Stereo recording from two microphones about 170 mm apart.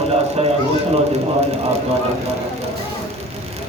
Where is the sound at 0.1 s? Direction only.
35° right (ahead or behind).